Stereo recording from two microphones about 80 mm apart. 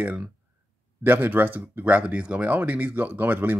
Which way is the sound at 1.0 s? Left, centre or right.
Right.